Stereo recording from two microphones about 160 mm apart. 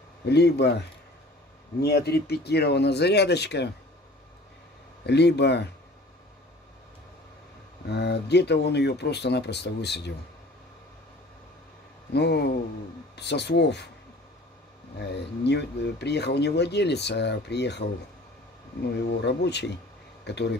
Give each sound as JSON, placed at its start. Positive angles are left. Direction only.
{"t": 0.3, "sound": "speech", "side_deg": 90}
{"t": 1.8, "sound": "speech", "side_deg": 90}
{"t": 5.0, "sound": "speech", "side_deg": 90}
{"t": 7.9, "sound": "speech", "side_deg": 90}
{"t": 12.1, "sound": "speech", "side_deg": 90}
{"t": 15.0, "sound": "speech", "side_deg": 90}